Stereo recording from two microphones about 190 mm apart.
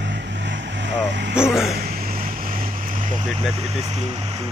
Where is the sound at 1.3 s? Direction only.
5° right (ahead or behind).